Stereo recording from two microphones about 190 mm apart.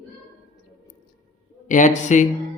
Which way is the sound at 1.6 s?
40° left (ahead or behind).